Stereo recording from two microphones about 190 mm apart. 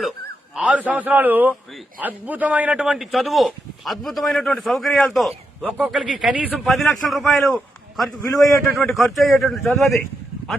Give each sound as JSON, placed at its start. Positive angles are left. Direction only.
{"t": 0.5, "sound": "a man's voice", "side_deg": -5}
{"t": 7.5, "sound": "a sound", "side_deg": 0}
{"t": 8.7, "sound": "a man's voice", "side_deg": 0}